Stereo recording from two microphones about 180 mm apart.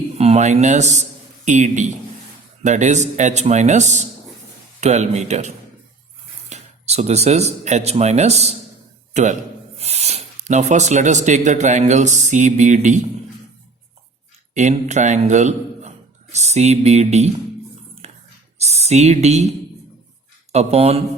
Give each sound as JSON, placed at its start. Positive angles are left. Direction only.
{"t": 0.2, "sound": "a man's voice", "side_deg": -40}
{"t": 14.5, "sound": "a man's voice", "side_deg": -40}
{"t": 18.0, "sound": "whispering", "side_deg": -35}
{"t": 18.9, "sound": "speech", "side_deg": -40}